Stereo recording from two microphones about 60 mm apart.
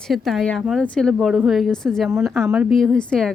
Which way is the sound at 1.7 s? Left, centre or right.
Centre.